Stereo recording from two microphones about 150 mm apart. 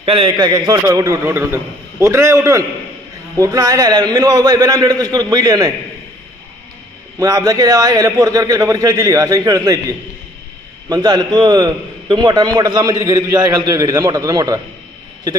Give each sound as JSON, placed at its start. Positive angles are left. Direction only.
{"t": 0.0, "sound": "a man's voice", "side_deg": -35}
{"t": 7.2, "sound": "a man's voice", "side_deg": -25}